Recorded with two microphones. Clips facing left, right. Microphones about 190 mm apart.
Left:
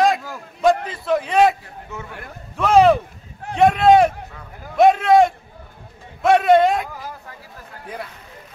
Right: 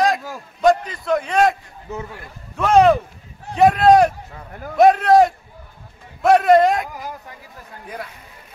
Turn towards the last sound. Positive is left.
turn(degrees=0)  # may be behind; listen again after turning